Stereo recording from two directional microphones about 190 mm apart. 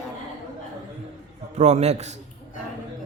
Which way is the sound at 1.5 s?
35° right (ahead or behind).